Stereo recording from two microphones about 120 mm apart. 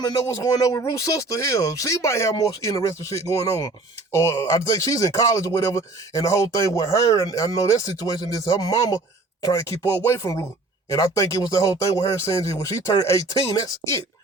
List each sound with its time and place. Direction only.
0.3 s speech: 30° left (ahead or behind)